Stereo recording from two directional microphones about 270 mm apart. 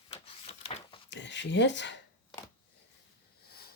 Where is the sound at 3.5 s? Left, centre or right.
Left.